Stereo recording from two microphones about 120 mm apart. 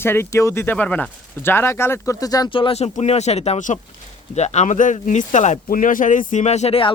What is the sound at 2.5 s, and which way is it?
Speech, 55° left (ahead or behind).